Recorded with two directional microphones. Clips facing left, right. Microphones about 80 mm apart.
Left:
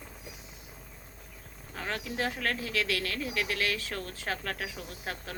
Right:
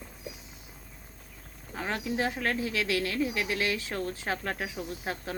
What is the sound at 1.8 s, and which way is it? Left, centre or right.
Speech, right.